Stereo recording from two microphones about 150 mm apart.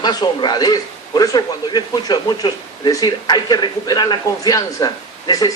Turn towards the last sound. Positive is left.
turn(degrees=25)  # may be behind; listen again after turning